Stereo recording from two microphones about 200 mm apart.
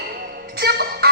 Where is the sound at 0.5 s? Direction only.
55° right (ahead or behind).